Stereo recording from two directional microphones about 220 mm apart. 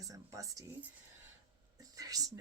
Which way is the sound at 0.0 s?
15° right (ahead or behind).